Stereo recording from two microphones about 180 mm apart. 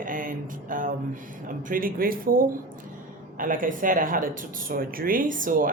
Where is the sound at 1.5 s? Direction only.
50° right (ahead or behind).